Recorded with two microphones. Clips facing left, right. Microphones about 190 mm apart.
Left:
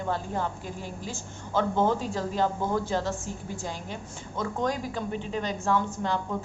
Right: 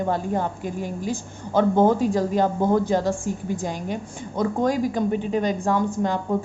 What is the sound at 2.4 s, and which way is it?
Speech, 50° right (ahead or behind).